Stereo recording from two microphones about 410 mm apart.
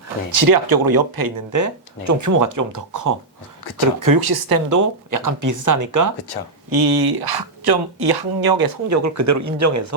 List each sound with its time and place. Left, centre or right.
0.3 s speech: right
6.7 s speech: right
8.9 s speech: right